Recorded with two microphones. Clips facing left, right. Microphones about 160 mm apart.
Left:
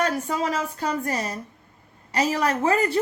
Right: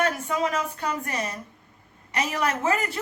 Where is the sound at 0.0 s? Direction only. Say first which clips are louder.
Left 1 dB; 35° left (ahead or behind).